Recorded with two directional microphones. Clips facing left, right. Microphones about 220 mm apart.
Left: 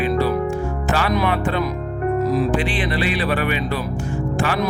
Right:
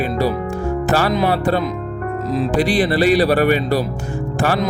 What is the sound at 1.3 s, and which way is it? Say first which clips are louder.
Music: right 3 dB; 40° right (ahead or behind).